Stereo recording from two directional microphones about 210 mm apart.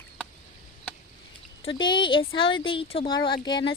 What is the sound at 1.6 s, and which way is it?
Speech, 20° left (ahead or behind).